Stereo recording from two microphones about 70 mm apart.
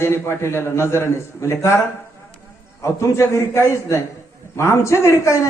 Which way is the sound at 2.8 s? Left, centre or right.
Left.